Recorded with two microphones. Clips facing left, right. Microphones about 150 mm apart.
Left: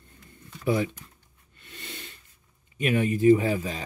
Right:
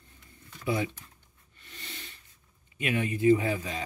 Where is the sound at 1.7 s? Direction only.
50° left (ahead or behind).